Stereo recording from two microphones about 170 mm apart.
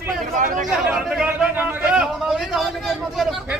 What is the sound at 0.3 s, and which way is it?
Speech, 50° right (ahead or behind).